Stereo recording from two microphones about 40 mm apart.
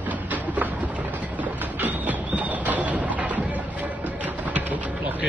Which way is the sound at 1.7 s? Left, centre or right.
Right.